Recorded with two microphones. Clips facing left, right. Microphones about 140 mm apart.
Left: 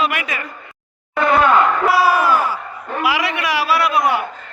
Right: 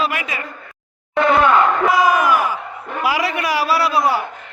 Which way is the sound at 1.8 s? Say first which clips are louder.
Even; 20° right (ahead or behind).